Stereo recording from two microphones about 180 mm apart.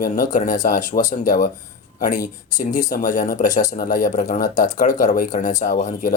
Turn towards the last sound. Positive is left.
turn(degrees=45)  # may be behind; listen again after turning